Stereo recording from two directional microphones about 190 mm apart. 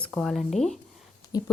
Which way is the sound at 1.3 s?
20° left (ahead or behind).